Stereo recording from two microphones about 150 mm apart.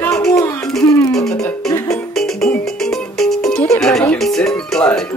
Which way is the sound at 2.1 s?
Centre (ahead or behind).